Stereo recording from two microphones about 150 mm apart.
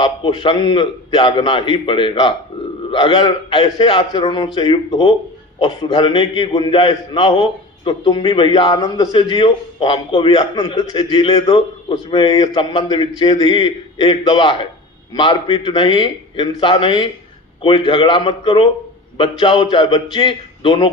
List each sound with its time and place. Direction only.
0.0 s a man's voice: 30° left (ahead or behind)